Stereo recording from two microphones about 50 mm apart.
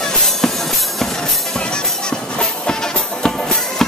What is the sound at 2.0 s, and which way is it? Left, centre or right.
Music, centre.